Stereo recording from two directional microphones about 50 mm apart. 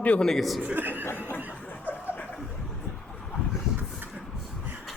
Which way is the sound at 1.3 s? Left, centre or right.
Right.